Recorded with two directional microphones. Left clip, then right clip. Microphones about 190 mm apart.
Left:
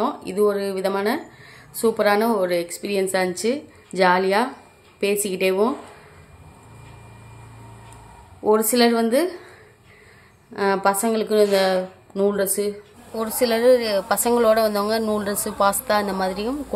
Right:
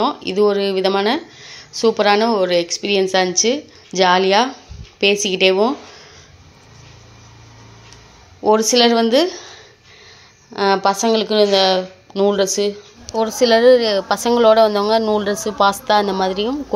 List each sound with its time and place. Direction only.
0.0 s speech: 20° right (ahead or behind)
8.4 s a woman's voice: 15° right (ahead or behind)